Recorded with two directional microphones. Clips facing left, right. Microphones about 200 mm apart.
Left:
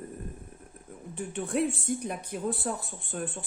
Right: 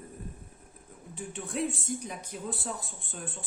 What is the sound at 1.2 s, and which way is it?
Speech, 60° left (ahead or behind).